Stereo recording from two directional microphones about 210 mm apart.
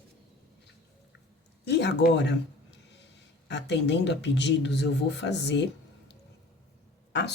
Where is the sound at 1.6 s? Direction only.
55° left (ahead or behind).